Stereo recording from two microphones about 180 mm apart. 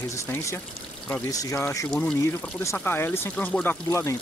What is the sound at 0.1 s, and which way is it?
Speech, 15° left (ahead or behind).